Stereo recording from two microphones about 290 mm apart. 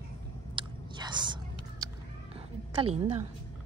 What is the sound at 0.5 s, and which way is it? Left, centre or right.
Chewing, centre.